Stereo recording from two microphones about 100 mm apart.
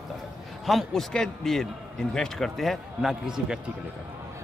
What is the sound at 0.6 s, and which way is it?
Speech, 5° left (ahead or behind).